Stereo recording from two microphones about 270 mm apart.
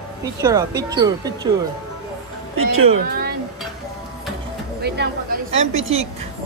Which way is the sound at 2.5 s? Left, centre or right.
Right.